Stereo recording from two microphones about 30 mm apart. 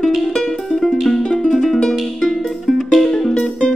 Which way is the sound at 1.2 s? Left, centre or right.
Left.